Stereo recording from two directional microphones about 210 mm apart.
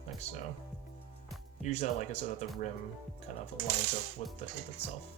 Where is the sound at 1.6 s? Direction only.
35° left (ahead or behind).